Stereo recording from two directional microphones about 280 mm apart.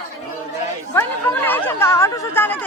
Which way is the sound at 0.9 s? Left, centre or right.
Centre.